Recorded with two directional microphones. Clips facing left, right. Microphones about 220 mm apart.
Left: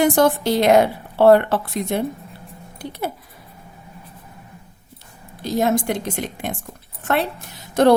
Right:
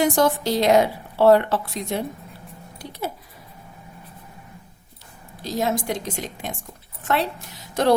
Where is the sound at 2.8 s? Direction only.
55° left (ahead or behind).